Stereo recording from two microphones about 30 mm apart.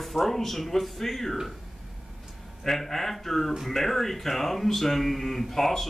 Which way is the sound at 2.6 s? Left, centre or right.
Centre.